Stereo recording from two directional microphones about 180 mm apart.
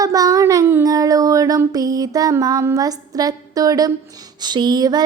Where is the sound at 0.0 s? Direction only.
20° right (ahead or behind).